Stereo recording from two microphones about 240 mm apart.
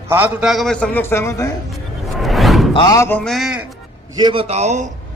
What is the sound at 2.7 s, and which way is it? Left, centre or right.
Speech, centre.